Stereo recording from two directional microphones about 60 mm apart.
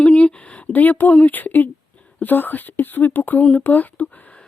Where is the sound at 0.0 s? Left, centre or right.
Left.